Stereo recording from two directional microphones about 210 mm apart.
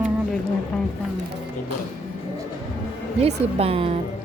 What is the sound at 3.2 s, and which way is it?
Speech, 30° right (ahead or behind).